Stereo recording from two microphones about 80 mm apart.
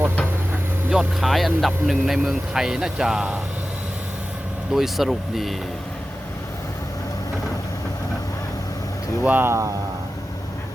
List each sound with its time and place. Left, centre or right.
0.9 s speech: centre
4.7 s speech: centre
9.2 s speech: right